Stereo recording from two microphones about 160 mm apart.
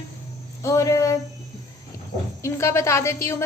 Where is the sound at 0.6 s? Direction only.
20° left (ahead or behind).